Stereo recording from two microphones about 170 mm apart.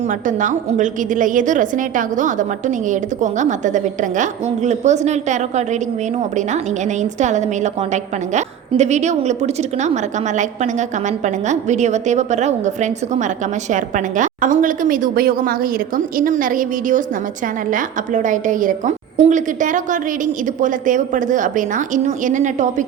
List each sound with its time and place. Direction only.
0.1 s a woman's voice: 50° right (ahead or behind)